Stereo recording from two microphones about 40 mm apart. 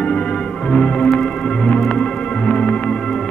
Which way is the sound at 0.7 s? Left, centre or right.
Left.